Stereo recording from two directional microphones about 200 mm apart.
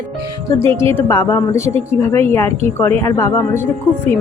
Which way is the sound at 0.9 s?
15° left (ahead or behind).